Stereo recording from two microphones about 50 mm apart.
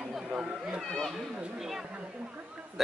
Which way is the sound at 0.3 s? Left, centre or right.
Centre.